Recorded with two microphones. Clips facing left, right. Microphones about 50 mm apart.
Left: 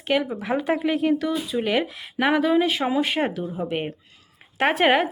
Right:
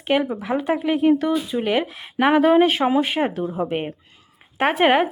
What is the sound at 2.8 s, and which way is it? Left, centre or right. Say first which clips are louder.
Speech: right 3 dB; centre.